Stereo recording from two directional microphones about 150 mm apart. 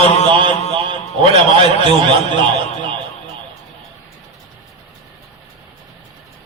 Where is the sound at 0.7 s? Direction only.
35° right (ahead or behind).